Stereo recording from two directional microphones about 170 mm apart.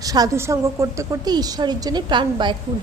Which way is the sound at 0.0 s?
20° right (ahead or behind).